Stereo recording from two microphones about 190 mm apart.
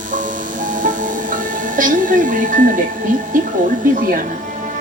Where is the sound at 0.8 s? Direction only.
45° right (ahead or behind).